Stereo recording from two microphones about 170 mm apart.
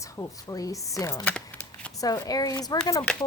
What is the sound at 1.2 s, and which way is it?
Crumpling, 10° left (ahead or behind).